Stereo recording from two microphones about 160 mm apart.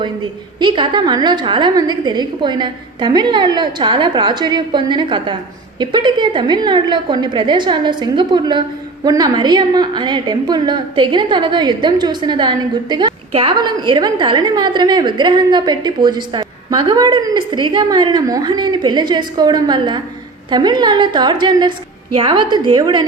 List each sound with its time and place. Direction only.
0.0 s a woman's voice: 30° right (ahead or behind)